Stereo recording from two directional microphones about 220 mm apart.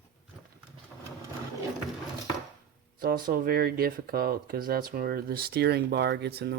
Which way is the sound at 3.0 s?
40° right (ahead or behind).